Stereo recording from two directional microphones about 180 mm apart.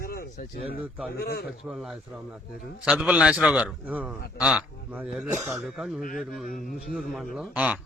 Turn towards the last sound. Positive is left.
turn(degrees=-10)  # may be behind; listen again after turning